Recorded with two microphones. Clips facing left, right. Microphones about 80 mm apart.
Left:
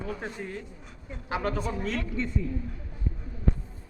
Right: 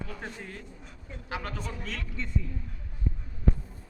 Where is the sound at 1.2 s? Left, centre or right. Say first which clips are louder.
Left 7 dB; left.